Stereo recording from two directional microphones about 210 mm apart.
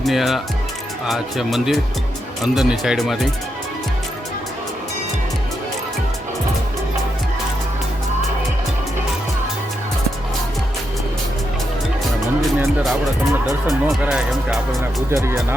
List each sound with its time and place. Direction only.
0.0 s speech: centre (ahead or behind)
12.4 s speech: centre (ahead or behind)
15.1 s speech: 10° right (ahead or behind)